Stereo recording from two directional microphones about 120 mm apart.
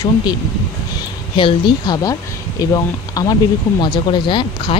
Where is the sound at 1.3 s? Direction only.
45° left (ahead or behind).